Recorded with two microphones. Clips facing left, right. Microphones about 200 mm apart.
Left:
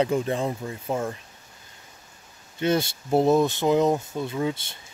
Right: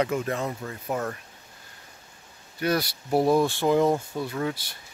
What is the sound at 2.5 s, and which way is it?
Speech, 25° left (ahead or behind).